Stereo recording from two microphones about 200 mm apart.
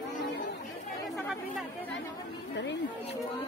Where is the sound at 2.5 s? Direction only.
60° left (ahead or behind).